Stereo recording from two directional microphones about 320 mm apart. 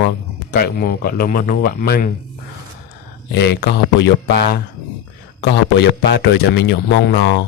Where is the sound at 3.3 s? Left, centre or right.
Left.